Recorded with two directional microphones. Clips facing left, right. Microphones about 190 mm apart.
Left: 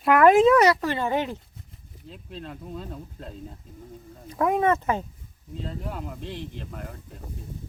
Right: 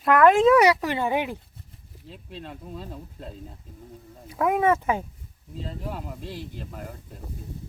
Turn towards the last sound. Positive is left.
turn(degrees=-5)  # may be behind; listen again after turning